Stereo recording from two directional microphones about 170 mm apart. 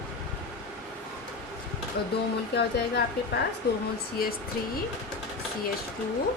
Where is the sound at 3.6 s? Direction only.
75° left (ahead or behind).